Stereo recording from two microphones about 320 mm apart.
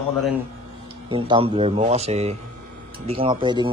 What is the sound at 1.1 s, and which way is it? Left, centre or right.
A man's voice, centre.